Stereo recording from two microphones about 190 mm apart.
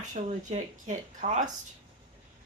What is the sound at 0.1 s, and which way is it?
Speech, 40° right (ahead or behind).